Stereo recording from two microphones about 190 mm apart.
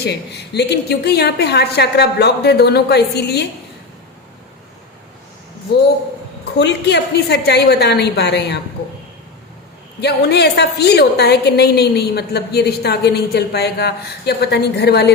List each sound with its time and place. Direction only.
0.0 s a woman's voice: 60° left (ahead or behind)
6.4 s a woman's voice: 65° left (ahead or behind)
10.0 s a woman's voice: 60° left (ahead or behind)